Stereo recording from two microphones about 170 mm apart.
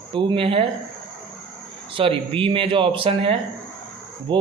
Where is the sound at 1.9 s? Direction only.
30° right (ahead or behind).